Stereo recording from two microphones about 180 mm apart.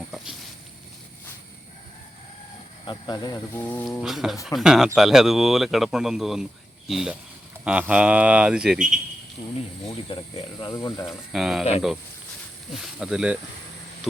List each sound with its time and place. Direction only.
2.8 s speech: 20° left (ahead or behind)
3.6 s a sound: 10° left (ahead or behind)
4.0 s speech: centre (ahead or behind)
9.4 s speech: 30° left (ahead or behind)
11.0 s speech: centre (ahead or behind)
12.8 s speech: 5° right (ahead or behind)